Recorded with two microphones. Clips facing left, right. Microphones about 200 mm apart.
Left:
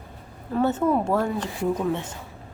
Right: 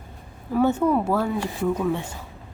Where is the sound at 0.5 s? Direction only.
15° right (ahead or behind).